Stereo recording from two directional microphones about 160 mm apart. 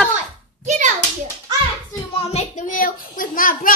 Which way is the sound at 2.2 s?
40° left (ahead or behind).